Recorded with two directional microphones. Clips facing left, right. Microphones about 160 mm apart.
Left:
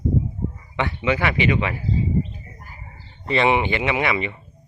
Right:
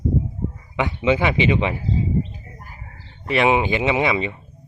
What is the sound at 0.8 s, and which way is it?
Speech, 20° right (ahead or behind).